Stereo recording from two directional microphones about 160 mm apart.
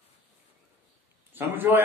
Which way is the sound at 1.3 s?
10° right (ahead or behind).